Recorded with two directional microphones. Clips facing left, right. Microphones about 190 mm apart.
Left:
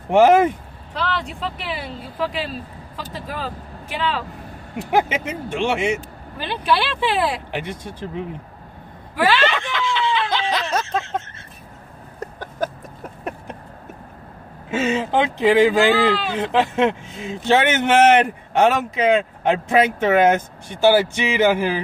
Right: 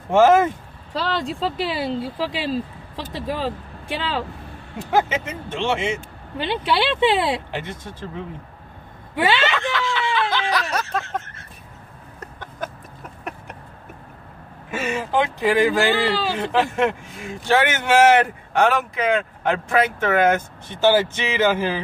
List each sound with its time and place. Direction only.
0.1 s speech: 15° left (ahead or behind)
0.9 s speech: 30° right (ahead or behind)
4.9 s speech: 15° left (ahead or behind)
6.3 s speech: 25° right (ahead or behind)
7.5 s speech: 15° left (ahead or behind)
9.1 s speech: 20° right (ahead or behind)
9.6 s a sound: 20° left (ahead or behind)
12.2 s a sound: 35° left (ahead or behind)
14.7 s speech: 25° left (ahead or behind)